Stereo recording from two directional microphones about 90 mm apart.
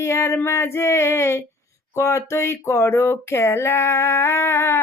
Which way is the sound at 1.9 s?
30° left (ahead or behind).